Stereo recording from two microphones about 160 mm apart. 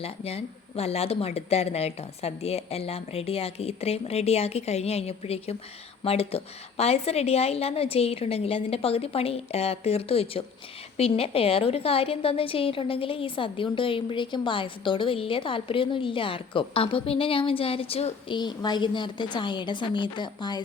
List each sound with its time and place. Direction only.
0.0 s a woman's voice: 40° left (ahead or behind)